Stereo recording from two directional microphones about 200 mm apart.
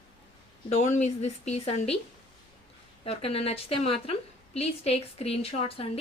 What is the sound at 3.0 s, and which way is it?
A woman's voice, 30° left (ahead or behind).